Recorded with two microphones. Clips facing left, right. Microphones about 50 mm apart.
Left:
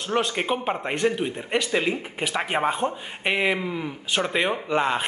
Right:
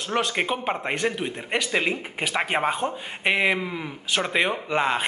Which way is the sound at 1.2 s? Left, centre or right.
Centre.